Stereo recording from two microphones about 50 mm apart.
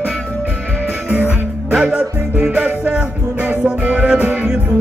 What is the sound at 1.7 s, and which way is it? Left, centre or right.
Music, centre.